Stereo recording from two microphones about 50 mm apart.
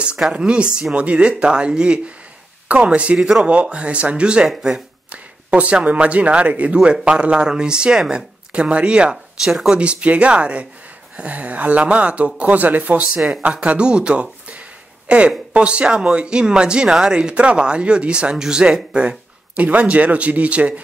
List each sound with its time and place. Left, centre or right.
0.3 s a man's voice: centre
3.2 s speech: centre
3.4 s a man's voice: right
5.1 s a sound: right
5.9 s a man's voice: right
9.4 s speech: centre
9.7 s a man's voice: right
13.3 s a man's voice: right